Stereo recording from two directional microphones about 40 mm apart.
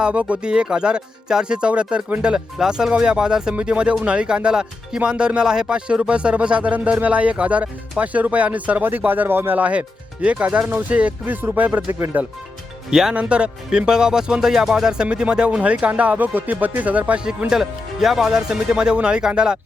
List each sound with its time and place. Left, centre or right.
0.0 s speech: right
0.4 s speech: right
8.8 s speech: right
9.6 s speech: right
10.7 s speech: right
12.9 s speech: centre
13.1 s speech: right
17.5 s speech: centre